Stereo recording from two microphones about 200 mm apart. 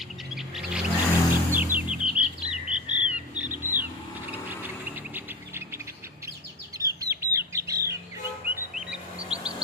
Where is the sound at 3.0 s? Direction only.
10° right (ahead or behind).